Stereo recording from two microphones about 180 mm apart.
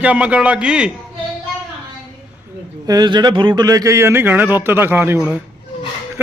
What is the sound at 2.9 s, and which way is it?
Speech, 25° right (ahead or behind).